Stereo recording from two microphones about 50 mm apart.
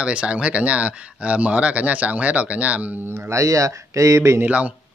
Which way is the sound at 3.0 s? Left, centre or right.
Right.